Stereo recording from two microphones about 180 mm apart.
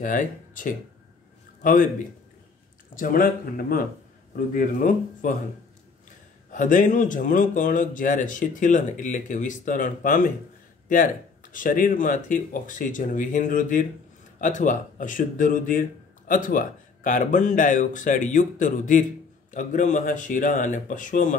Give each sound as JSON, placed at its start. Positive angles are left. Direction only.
{"t": 0.0, "sound": "a man's voice", "side_deg": 45}
{"t": 2.9, "sound": "speech", "side_deg": 50}
{"t": 6.5, "sound": "speech", "side_deg": 45}
{"t": 11.5, "sound": "speech", "side_deg": 50}